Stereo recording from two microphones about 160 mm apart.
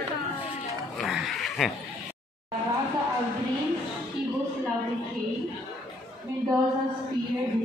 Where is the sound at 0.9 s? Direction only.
Centre (ahead or behind).